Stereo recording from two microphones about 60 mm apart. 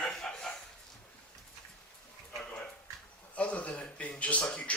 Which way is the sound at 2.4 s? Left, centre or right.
Centre.